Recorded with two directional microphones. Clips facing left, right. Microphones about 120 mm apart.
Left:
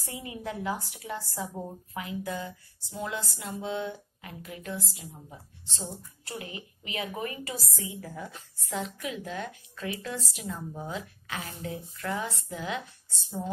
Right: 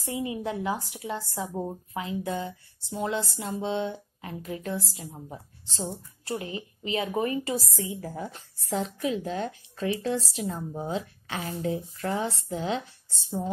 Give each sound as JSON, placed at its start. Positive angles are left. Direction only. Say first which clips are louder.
{"t": 0.0, "sound": "a woman's voice", "louder": "right 7 dB", "side_deg": -25}